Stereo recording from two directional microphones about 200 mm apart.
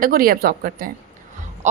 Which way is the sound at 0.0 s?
45° right (ahead or behind).